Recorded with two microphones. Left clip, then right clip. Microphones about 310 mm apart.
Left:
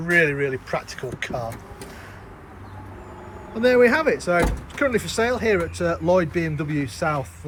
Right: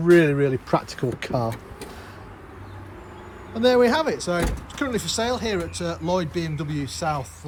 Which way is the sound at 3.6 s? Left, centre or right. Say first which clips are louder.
Left 1 dB; centre.